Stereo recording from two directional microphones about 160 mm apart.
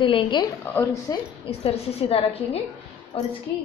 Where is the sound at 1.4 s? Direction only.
40° left (ahead or behind).